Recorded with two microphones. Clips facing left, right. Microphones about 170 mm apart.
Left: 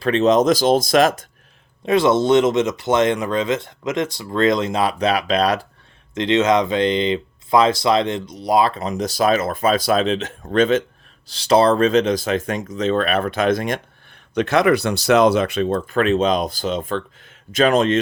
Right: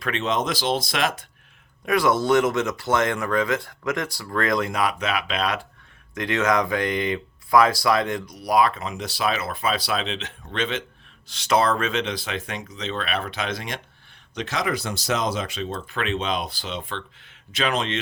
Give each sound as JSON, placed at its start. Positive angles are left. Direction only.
{"t": 0.0, "sound": "speech", "side_deg": 40}
{"t": 1.8, "sound": "speech", "side_deg": 25}
{"t": 6.1, "sound": "speech", "side_deg": 20}
{"t": 11.3, "sound": "speech", "side_deg": 35}